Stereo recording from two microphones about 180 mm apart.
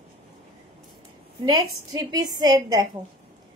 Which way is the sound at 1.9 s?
20° right (ahead or behind).